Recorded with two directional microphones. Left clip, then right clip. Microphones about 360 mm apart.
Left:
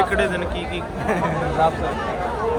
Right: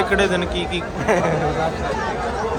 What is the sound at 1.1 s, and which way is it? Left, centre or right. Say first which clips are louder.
Speech: right 5 dB; centre.